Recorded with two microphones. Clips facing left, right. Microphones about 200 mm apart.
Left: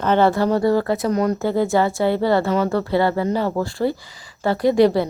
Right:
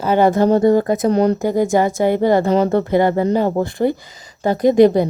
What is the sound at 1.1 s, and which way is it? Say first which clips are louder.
Speech: right 5 dB; 30° right (ahead or behind).